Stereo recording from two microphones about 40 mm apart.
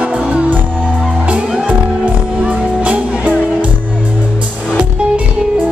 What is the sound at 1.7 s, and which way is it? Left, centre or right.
Music, right.